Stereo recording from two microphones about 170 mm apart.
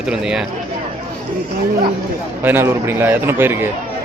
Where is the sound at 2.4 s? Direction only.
10° right (ahead or behind).